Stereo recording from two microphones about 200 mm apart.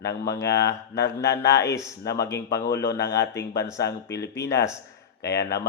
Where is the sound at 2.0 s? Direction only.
55° left (ahead or behind).